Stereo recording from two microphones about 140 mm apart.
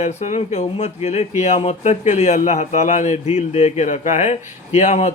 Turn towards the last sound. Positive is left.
turn(degrees=55)  # may be behind; listen again after turning